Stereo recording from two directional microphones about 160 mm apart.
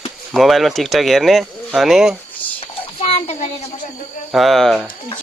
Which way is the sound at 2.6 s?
40° left (ahead or behind).